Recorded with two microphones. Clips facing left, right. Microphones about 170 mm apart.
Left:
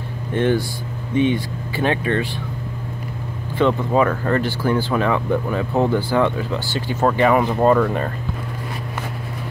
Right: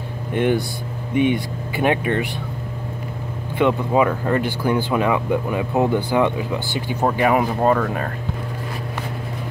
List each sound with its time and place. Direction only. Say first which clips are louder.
0.3 s speech: even; 15° right (ahead or behind)
3.5 s speech: even; 10° right (ahead or behind)